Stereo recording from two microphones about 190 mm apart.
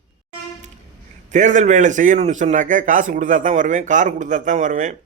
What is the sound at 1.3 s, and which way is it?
A man's voice, 40° right (ahead or behind).